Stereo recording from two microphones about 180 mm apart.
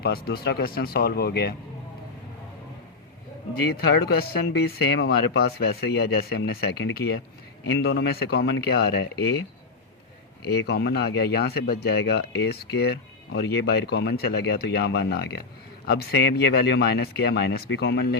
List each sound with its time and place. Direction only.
0.0 s speech: 60° left (ahead or behind)
3.5 s speech: 60° left (ahead or behind)
10.4 s speech: 65° left (ahead or behind)